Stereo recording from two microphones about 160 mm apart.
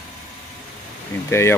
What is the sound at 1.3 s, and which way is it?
Speech, 15° left (ahead or behind).